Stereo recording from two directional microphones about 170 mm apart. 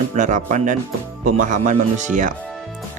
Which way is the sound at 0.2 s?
45° right (ahead or behind).